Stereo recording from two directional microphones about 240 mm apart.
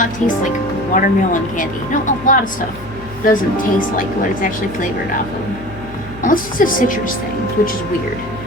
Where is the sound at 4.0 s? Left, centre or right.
Left.